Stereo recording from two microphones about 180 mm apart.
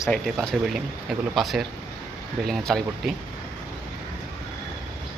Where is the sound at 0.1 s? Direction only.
Centre (ahead or behind).